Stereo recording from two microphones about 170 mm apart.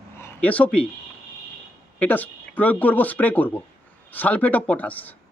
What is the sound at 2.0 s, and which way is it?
Speech, 10° left (ahead or behind).